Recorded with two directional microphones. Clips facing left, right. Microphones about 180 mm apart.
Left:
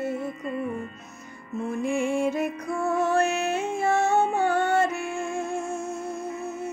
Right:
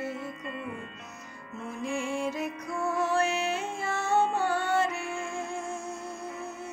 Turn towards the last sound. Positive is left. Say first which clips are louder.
# left 5 dB
turn(degrees=45)  # may be behind; listen again after turning